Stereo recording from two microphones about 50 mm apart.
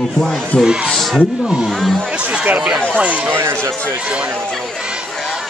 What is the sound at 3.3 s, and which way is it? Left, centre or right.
Speech, right.